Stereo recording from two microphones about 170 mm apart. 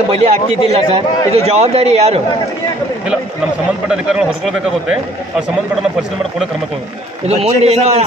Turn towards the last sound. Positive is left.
turn(degrees=-40)  # may be behind; listen again after turning